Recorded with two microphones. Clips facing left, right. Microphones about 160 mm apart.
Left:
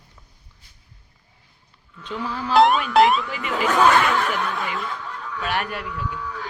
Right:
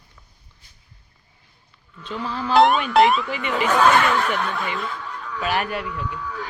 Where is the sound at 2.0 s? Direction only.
15° left (ahead or behind).